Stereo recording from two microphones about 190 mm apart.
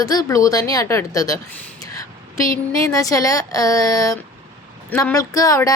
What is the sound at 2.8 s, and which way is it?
A woman's voice, 15° left (ahead or behind).